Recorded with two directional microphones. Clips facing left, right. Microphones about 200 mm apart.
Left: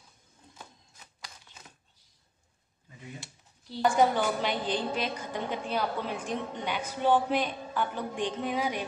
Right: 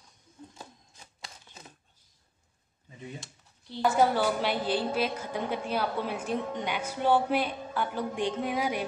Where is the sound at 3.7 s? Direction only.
5° right (ahead or behind).